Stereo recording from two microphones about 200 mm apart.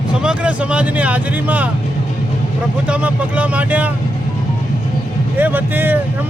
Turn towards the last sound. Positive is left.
turn(degrees=-10)  # may be behind; listen again after turning